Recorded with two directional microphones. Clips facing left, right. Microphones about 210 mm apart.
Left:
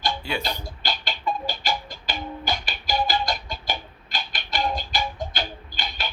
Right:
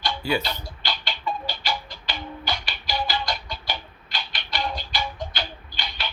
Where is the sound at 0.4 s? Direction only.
45° left (ahead or behind).